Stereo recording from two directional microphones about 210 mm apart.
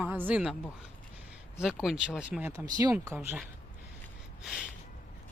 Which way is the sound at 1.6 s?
5° right (ahead or behind).